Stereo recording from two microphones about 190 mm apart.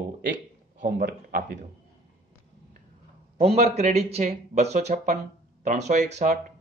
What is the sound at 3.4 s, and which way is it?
Speech, 35° right (ahead or behind).